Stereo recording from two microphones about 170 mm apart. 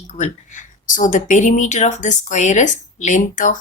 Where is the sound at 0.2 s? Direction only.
50° left (ahead or behind).